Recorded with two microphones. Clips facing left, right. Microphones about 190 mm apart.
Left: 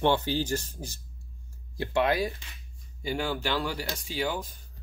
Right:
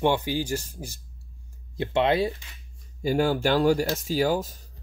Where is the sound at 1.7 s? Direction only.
25° right (ahead or behind).